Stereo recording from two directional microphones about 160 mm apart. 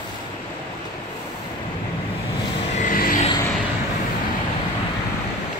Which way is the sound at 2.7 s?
60° left (ahead or behind).